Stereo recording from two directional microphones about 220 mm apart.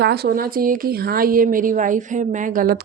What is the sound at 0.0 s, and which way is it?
Speech, 45° right (ahead or behind).